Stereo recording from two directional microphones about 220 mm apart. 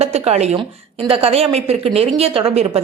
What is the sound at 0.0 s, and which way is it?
A woman's voice, 30° right (ahead or behind).